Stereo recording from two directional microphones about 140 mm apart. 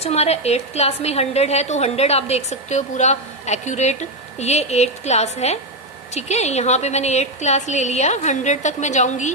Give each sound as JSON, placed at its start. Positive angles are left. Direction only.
{"t": 0.0, "sound": "a woman's voice", "side_deg": 50}